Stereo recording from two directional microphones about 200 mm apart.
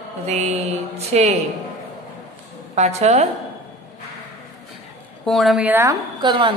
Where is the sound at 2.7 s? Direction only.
35° right (ahead or behind).